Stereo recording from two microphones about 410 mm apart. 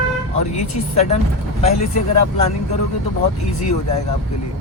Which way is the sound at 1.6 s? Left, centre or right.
Centre.